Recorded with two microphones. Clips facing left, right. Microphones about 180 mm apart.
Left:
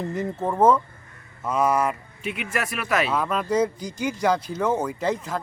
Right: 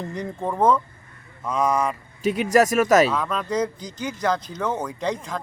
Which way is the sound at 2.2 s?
40° right (ahead or behind).